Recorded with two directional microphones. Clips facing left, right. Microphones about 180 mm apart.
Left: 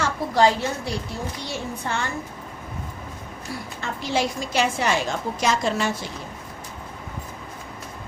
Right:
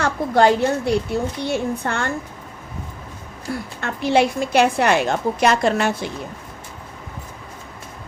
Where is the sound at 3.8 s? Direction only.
60° right (ahead or behind).